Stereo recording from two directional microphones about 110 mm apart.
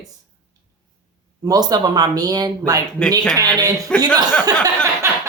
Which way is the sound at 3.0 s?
10° left (ahead or behind).